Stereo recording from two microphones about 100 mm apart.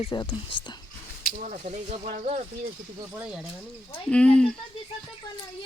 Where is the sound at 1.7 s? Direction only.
85° right.